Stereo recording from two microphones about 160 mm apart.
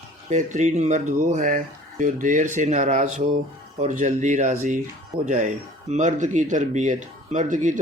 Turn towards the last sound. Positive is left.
turn(degrees=-55)  # may be behind; listen again after turning